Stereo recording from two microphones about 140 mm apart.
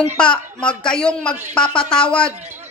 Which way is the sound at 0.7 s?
5° left (ahead or behind).